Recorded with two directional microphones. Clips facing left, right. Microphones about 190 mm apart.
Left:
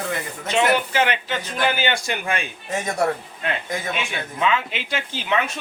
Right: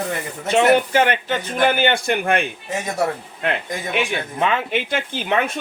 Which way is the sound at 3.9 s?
55° right (ahead or behind).